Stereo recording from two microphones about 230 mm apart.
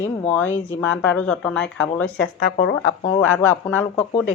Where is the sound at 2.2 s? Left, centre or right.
Left.